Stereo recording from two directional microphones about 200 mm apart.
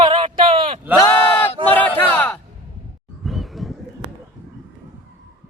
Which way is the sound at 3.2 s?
Centre (ahead or behind).